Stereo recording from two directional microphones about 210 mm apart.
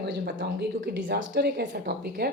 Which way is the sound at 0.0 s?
55° right (ahead or behind).